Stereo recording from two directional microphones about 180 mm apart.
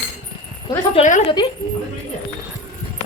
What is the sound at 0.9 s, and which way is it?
Speech, 45° left (ahead or behind).